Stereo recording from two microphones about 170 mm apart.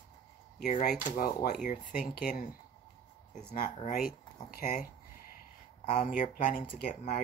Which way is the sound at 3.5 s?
55° left (ahead or behind).